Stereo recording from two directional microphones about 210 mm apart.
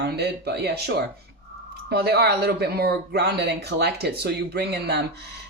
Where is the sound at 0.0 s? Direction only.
50° right (ahead or behind).